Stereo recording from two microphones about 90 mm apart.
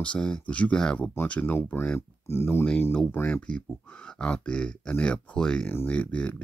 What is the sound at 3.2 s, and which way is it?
Speech, 10° left (ahead or behind).